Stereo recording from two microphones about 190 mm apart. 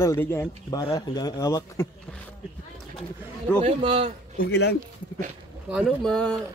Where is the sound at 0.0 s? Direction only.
15° left (ahead or behind).